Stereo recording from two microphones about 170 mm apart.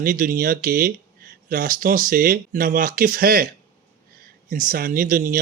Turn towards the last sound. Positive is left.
turn(degrees=-55)  # may be behind; listen again after turning